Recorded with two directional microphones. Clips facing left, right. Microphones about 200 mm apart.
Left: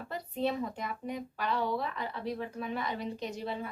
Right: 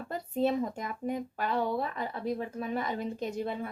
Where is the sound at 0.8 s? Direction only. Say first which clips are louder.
Right 3 dB; 45° right (ahead or behind).